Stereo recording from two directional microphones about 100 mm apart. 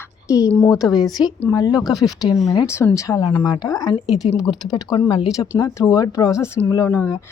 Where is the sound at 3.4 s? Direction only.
40° left (ahead or behind).